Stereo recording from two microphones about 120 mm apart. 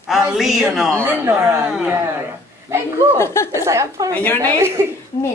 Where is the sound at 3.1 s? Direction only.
20° left (ahead or behind).